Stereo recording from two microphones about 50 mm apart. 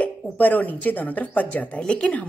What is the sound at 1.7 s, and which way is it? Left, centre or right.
Speech, left.